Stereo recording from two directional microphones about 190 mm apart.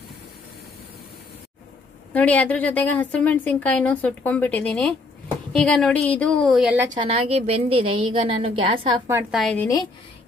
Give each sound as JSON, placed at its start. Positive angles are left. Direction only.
{"t": 2.1, "sound": "a woman's voice", "side_deg": 5}
{"t": 7.0, "sound": "a woman's voice", "side_deg": -30}
{"t": 9.3, "sound": "a woman's voice", "side_deg": 5}